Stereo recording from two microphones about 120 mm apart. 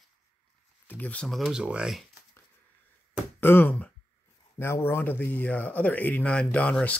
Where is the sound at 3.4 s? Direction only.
20° left (ahead or behind).